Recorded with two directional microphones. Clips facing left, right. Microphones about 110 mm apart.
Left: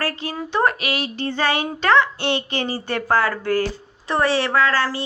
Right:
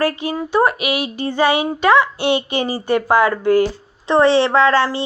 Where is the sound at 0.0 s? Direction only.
15° right (ahead or behind).